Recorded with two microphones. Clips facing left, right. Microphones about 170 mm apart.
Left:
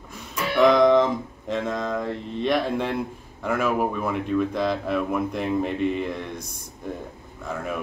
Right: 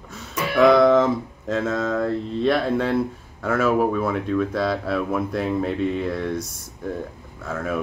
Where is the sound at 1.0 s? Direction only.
15° left (ahead or behind).